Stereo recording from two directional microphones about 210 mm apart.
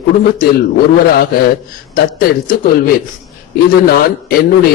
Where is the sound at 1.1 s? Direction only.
45° left (ahead or behind).